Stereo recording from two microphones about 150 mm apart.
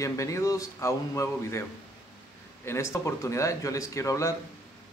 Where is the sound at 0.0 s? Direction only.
20° left (ahead or behind).